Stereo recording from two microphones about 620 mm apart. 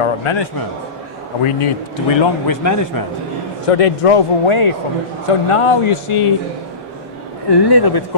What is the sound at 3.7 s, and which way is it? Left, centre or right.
A man's voice, left.